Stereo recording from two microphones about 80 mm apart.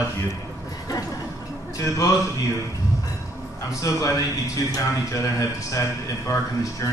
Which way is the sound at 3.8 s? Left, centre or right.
Left.